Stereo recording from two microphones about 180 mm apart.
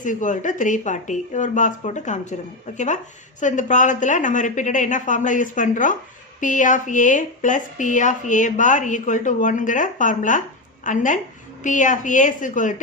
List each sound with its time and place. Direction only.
0.0 s speech: 45° left (ahead or behind)